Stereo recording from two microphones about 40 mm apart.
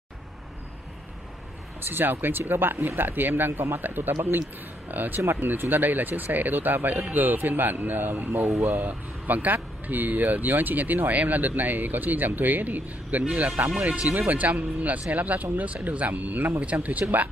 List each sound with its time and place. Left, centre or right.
1.8 s speech: right
4.9 s speech: right
16.6 s speech: right